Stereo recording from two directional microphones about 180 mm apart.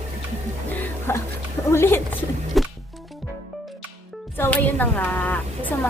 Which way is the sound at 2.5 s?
Centre (ahead or behind).